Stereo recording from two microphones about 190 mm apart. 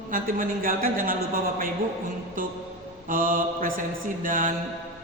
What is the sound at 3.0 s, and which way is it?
A woman's voice, 45° right (ahead or behind).